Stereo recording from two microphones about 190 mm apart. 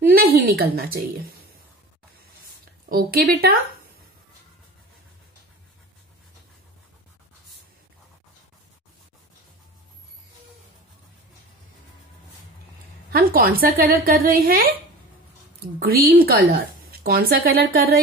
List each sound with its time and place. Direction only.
0.1 s a sound: 55° right (ahead or behind)
2.9 s a woman's voice: 55° right (ahead or behind)
13.1 s a woman's voice: 50° right (ahead or behind)
16.2 s a woman's voice: 50° right (ahead or behind)